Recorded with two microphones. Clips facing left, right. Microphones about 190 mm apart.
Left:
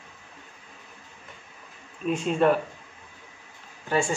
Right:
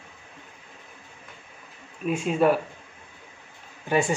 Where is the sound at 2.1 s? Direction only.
5° right (ahead or behind).